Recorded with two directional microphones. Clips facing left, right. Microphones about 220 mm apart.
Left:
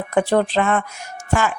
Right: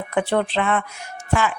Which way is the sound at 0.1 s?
40° left (ahead or behind).